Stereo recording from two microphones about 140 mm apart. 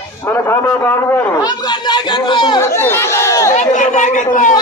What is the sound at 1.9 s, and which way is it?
Speech, 35° left (ahead or behind).